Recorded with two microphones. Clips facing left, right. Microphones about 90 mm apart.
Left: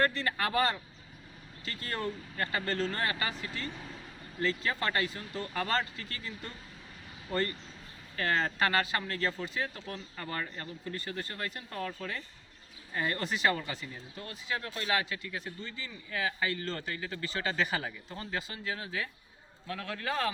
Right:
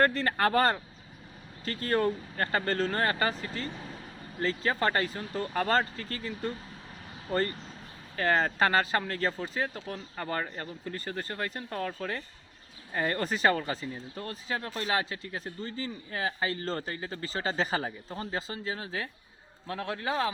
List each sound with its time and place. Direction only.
0.0 s speech: 45° right (ahead or behind)
11.8 s a man's voice: 45° right (ahead or behind); by 20.3 s 20° right (ahead or behind)